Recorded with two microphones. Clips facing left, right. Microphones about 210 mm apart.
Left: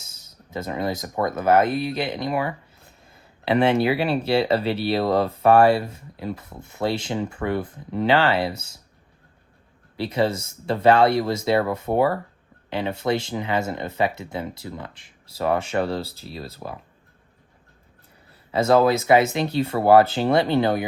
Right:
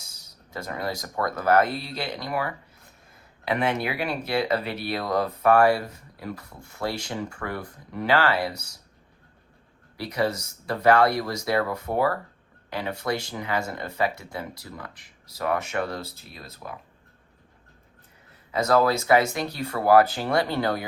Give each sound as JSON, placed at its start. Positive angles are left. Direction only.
{"t": 0.0, "sound": "speech", "side_deg": 20}
{"t": 10.0, "sound": "speech", "side_deg": 25}
{"t": 18.5, "sound": "speech", "side_deg": 25}